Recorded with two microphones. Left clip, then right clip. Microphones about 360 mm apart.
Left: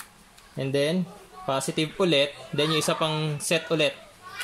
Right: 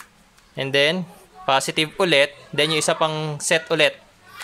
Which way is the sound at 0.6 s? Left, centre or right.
Right.